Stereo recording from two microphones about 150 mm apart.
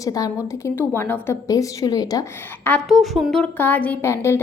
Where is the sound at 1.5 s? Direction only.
25° left (ahead or behind).